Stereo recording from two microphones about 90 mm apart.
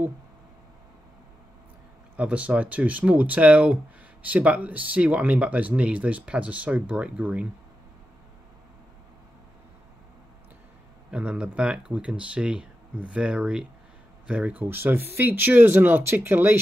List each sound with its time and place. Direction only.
2.1 s speech: 15° right (ahead or behind)
11.1 s speech: 10° right (ahead or behind)